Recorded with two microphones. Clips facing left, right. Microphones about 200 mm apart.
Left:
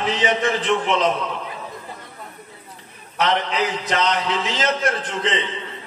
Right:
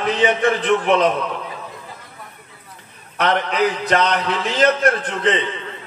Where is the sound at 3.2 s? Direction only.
55° right (ahead or behind).